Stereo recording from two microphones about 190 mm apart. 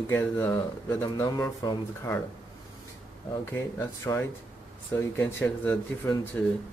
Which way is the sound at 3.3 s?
15° left (ahead or behind).